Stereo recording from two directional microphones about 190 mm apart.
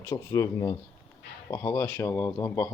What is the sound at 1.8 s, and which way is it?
Speech, 10° left (ahead or behind).